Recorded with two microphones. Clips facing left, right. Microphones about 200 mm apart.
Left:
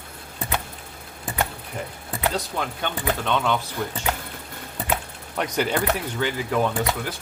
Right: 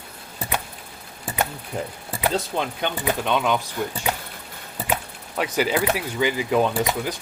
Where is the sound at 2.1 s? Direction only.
15° right (ahead or behind).